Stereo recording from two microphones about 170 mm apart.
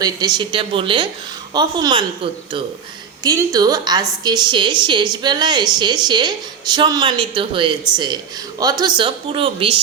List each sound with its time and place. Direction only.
0.0 s a woman's voice: 25° right (ahead or behind)